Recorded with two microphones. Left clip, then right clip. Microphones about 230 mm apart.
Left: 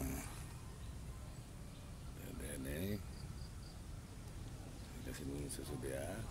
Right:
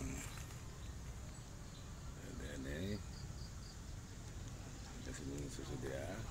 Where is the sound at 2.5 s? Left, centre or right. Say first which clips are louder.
Left 1 dB; centre.